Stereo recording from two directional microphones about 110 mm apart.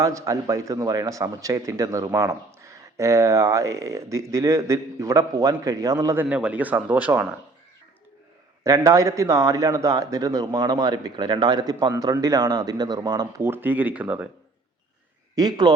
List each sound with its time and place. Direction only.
0.0 s a man's voice: 30° right (ahead or behind)
6.2 s speech: 10° right (ahead or behind)
8.6 s a man's voice: 30° right (ahead or behind)
13.4 s speech: 20° right (ahead or behind)
15.4 s a man's voice: 40° right (ahead or behind)